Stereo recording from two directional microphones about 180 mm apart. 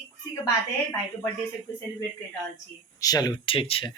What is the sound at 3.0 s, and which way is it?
Speech, 20° left (ahead or behind).